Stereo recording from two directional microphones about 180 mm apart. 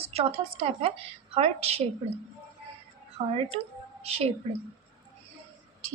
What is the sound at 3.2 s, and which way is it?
A woman's voice, 35° right (ahead or behind).